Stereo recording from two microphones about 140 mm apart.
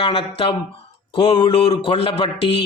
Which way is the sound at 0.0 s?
40° left (ahead or behind).